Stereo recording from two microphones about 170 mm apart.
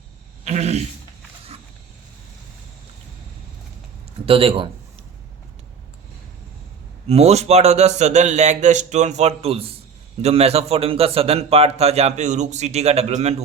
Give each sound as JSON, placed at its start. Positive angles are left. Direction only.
{"t": 0.4, "sound": "a sound", "side_deg": -40}
{"t": 4.3, "sound": "a man's voice", "side_deg": -35}
{"t": 7.1, "sound": "a man's voice", "side_deg": -40}